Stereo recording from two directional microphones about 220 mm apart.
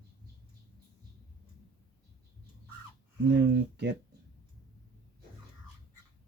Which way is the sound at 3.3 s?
50° right (ahead or behind).